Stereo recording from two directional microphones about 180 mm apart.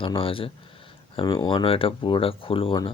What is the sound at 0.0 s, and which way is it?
Speech, 30° left (ahead or behind).